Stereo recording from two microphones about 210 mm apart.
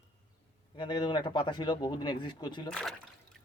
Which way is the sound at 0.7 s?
20° left (ahead or behind).